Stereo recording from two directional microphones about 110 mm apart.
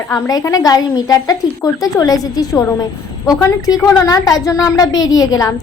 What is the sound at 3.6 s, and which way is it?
Speech, 35° left (ahead or behind).